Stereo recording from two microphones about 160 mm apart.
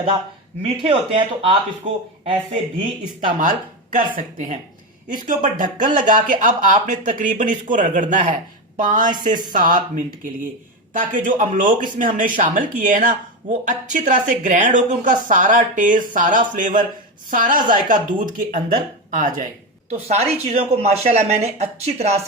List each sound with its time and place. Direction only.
0.6 s speech: 35° right (ahead or behind)
3.2 s speech: 55° right (ahead or behind)
19.9 s speech: 40° right (ahead or behind)